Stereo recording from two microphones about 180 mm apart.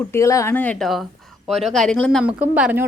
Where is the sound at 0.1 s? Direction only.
15° left (ahead or behind).